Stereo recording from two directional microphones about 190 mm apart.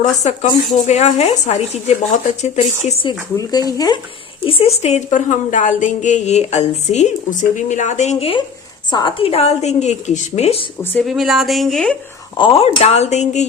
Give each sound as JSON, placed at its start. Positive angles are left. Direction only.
{"t": 0.0, "sound": "speech", "side_deg": 40}
{"t": 4.4, "sound": "speech", "side_deg": 30}
{"t": 10.9, "sound": "speech", "side_deg": 0}
{"t": 12.4, "sound": "speech", "side_deg": 30}